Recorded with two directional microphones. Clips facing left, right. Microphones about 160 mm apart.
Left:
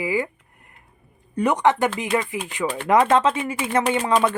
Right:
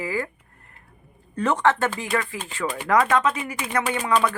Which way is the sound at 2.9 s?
25° left (ahead or behind).